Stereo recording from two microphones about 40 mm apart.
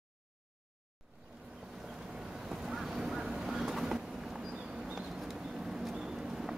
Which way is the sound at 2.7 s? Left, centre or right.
Centre.